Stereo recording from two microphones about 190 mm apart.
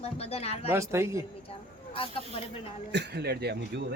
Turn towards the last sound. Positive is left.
turn(degrees=-55)  # may be behind; listen again after turning